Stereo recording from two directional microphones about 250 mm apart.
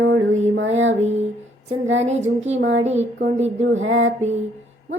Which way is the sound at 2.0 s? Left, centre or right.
Right.